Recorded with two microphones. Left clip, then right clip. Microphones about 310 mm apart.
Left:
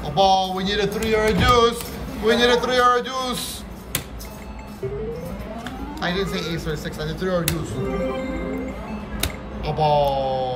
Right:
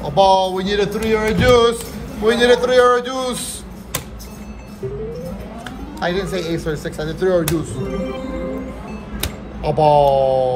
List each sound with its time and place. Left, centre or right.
0.0 s speech: centre
5.9 s speech: centre
9.2 s music: centre
10.2 s a sound: right